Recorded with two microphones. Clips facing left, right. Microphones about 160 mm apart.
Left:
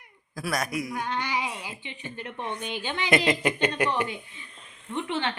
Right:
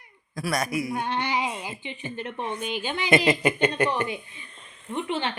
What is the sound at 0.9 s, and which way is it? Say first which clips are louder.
Female singing: right 2 dB; 25° right (ahead or behind).